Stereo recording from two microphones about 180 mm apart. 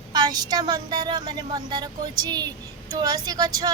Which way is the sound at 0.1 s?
20° right (ahead or behind).